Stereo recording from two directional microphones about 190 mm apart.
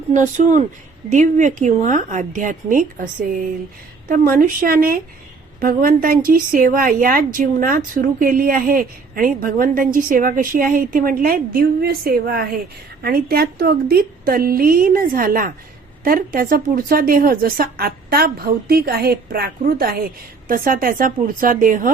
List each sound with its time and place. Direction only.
1.1 s speech: 40° right (ahead or behind)